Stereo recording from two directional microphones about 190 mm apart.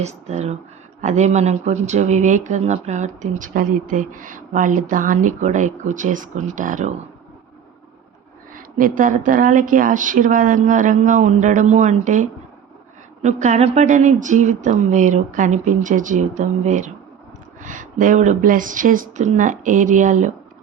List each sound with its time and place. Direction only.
0.0 s speech: 35° right (ahead or behind)
8.5 s speech: 45° right (ahead or behind)